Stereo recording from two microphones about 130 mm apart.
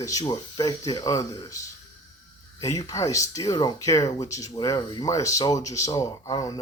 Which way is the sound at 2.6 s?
25° left (ahead or behind).